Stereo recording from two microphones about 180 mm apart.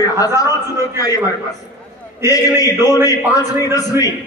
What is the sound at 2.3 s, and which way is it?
A man's voice, 20° left (ahead or behind).